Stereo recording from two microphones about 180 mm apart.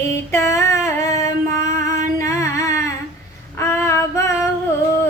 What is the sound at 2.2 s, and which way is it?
Music, 15° left (ahead or behind).